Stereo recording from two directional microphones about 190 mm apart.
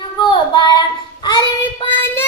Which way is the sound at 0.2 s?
25° left (ahead or behind).